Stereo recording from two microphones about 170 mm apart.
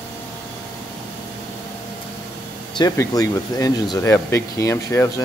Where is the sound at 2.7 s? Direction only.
25° left (ahead or behind).